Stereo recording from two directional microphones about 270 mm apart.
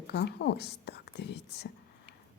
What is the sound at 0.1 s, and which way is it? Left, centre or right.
Speech, left.